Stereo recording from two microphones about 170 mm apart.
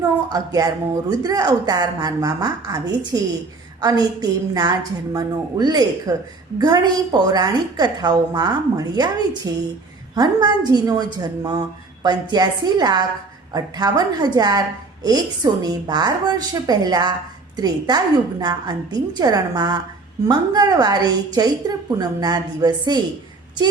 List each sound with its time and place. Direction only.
0.3 s a woman's voice: 20° right (ahead or behind)